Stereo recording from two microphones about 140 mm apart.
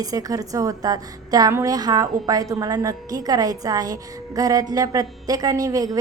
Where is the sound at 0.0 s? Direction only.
25° right (ahead or behind).